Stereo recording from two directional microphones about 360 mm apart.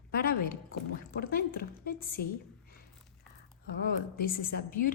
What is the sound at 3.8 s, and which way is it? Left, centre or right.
A woman's voice, left.